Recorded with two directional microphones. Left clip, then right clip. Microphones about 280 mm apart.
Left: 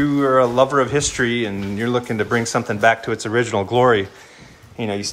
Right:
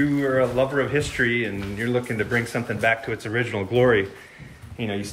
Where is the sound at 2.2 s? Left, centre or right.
Left.